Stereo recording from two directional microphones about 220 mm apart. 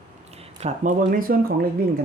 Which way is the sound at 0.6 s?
35° right (ahead or behind).